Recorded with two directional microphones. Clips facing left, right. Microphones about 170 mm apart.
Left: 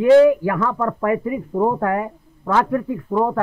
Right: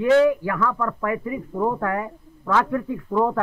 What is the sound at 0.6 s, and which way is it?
Speech, 30° left (ahead or behind).